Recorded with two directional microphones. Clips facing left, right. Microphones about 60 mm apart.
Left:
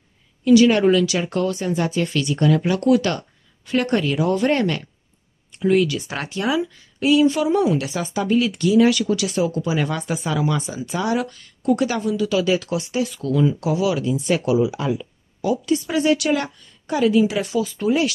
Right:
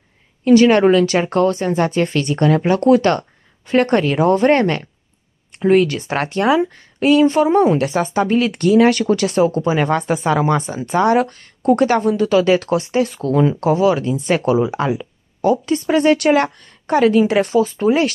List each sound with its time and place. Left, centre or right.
0.5 s speech: right